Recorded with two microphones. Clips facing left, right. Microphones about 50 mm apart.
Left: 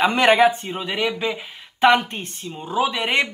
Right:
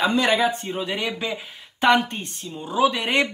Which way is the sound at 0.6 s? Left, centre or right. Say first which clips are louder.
Left 2 dB; centre.